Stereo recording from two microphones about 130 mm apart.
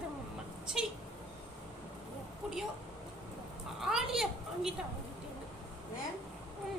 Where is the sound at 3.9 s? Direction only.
5° right (ahead or behind).